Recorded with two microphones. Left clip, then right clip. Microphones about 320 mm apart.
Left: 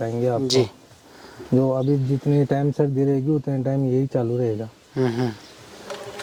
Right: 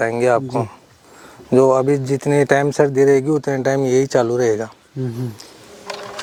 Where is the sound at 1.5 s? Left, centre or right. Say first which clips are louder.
Right 8 dB; centre.